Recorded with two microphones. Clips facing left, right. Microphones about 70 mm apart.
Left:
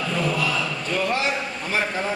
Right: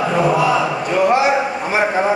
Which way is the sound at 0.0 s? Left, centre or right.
Right.